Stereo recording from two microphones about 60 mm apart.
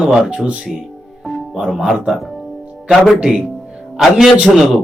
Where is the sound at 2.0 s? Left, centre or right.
Centre.